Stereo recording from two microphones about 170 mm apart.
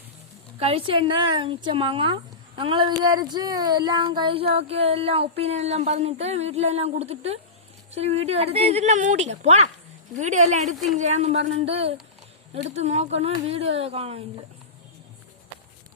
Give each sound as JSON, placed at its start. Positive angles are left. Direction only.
{"t": 0.6, "sound": "speech", "side_deg": -35}